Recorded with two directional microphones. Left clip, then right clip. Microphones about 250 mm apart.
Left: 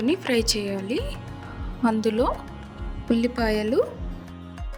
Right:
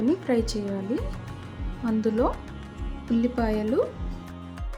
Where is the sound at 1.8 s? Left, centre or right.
Left.